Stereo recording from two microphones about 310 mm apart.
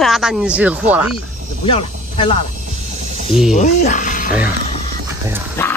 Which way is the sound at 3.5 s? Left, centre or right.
Left.